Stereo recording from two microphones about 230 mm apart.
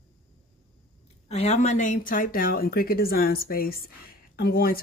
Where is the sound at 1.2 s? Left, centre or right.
Left.